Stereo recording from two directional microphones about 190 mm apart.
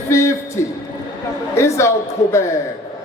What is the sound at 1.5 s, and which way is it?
Speech, 15° left (ahead or behind).